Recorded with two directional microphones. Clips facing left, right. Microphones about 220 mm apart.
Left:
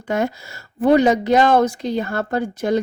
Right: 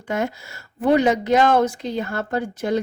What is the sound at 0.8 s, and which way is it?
Speech, 40° left (ahead or behind).